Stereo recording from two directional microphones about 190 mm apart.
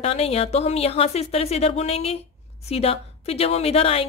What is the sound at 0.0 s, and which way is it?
A woman's voice, 30° left (ahead or behind).